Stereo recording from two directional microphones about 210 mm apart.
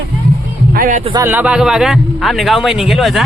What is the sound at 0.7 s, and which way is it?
Speech, 40° right (ahead or behind).